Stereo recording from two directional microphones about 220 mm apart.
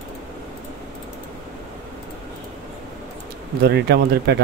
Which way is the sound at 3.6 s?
50° right (ahead or behind).